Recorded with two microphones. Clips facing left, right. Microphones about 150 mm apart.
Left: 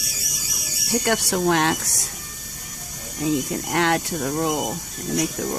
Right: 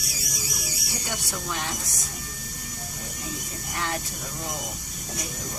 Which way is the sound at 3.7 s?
85° left.